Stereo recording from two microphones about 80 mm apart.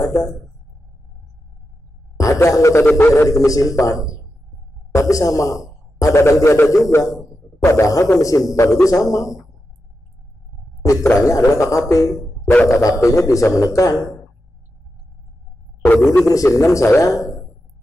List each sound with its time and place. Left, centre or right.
0.0 s speech: left
2.1 s a sound: left
2.8 s a man's voice: left
3.3 s a man's voice: left
10.9 s a man's voice: left
16.3 s a man's voice: left